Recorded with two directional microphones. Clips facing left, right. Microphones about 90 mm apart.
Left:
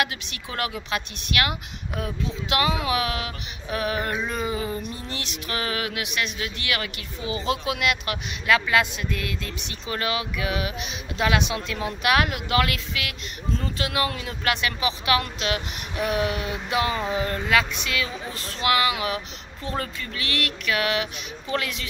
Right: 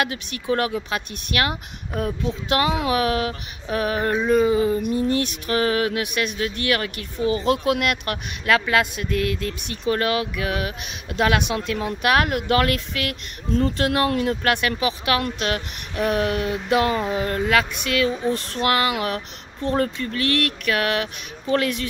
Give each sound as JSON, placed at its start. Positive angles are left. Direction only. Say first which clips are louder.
{"t": 0.0, "sound": "speech", "louder": "right 2 dB", "side_deg": -40}
{"t": 5.1, "sound": "speech", "louder": "right 9 dB", "side_deg": -45}